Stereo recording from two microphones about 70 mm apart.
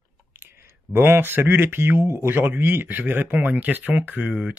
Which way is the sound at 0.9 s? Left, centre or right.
Right.